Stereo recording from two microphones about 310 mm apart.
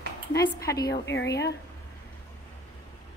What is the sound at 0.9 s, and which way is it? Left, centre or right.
Speech, left.